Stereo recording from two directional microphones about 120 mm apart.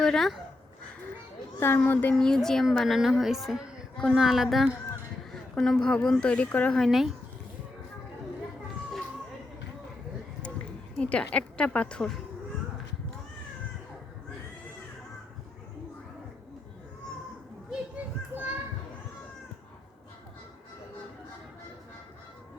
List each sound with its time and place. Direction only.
0.0 s speech: 5° left (ahead or behind)
1.5 s a woman's voice: 20° left (ahead or behind)
2.1 s a woman's voice: 5° left (ahead or behind)
10.9 s a woman's voice: 10° left (ahead or behind)
17.7 s children playing: 15° right (ahead or behind)